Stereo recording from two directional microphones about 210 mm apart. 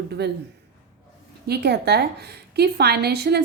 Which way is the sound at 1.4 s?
50° right (ahead or behind).